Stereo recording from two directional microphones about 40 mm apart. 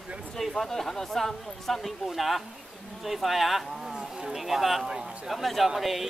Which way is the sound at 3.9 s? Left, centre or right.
Centre.